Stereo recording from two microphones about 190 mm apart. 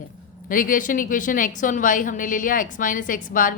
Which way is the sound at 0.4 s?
45° left (ahead or behind).